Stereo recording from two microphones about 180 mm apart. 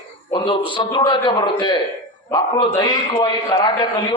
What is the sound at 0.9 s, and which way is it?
A man's voice, 25° left (ahead or behind).